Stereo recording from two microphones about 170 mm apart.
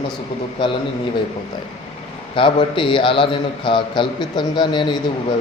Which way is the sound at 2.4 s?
30° left (ahead or behind).